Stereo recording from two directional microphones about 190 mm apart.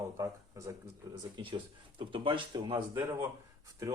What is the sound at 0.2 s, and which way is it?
Speech, 15° right (ahead or behind).